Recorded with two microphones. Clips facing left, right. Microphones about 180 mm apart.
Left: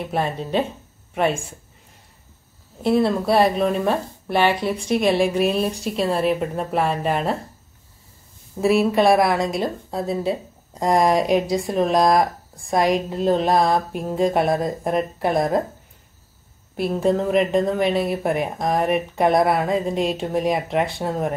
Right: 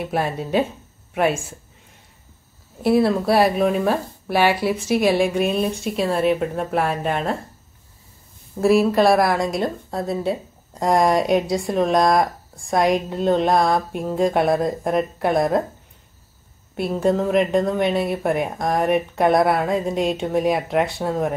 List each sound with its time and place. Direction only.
0.0 s a woman's voice: 5° right (ahead or behind)
2.8 s a woman's voice: 5° right (ahead or behind)
8.5 s a woman's voice: centre (ahead or behind)
16.7 s a woman's voice: centre (ahead or behind)